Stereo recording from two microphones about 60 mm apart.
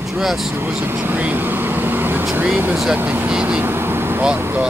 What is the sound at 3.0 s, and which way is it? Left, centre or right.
Speech, right.